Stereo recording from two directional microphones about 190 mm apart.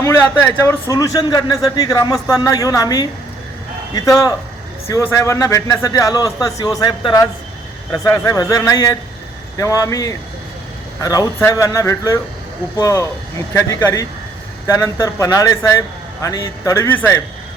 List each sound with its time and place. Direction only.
0.0 s a man's voice: 10° left (ahead or behind)